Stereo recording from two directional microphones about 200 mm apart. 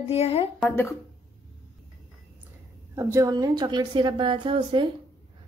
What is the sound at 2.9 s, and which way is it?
A woman's voice, 15° right (ahead or behind).